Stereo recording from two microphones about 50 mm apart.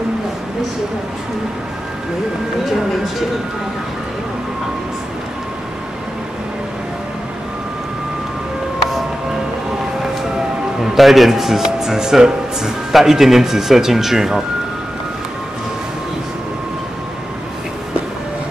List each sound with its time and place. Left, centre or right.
10.8 s speech: centre